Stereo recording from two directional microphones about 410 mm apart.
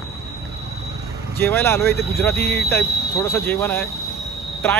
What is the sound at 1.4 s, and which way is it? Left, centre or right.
Speech, centre.